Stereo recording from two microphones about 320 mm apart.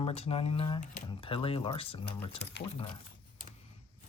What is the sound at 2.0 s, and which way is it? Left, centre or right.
Speech, left.